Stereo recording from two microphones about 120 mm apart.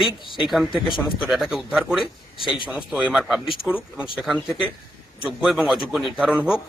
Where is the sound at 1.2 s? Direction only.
5° right (ahead or behind).